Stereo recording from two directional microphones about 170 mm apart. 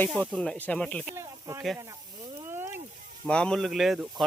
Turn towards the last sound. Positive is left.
turn(degrees=0)  # may be behind; listen again after turning